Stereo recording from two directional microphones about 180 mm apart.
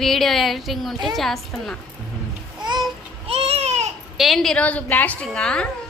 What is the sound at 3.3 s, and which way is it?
Baby cry, 35° right (ahead or behind).